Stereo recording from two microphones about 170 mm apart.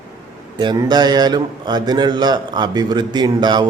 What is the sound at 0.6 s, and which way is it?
A man's voice, 25° right (ahead or behind).